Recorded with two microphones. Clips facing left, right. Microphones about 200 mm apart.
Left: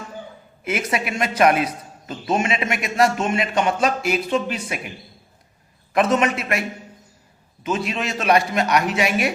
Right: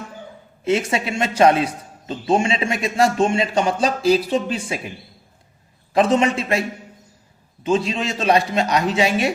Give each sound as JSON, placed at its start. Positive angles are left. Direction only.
{"t": 0.6, "sound": "a man's voice", "side_deg": -25}
{"t": 5.9, "sound": "a man's voice", "side_deg": -30}